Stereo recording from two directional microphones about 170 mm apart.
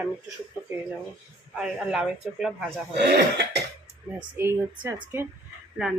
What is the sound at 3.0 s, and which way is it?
Speech, 75° right (ahead or behind).